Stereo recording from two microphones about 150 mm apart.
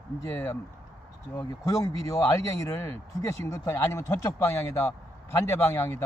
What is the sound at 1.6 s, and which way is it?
Speech, 20° left (ahead or behind).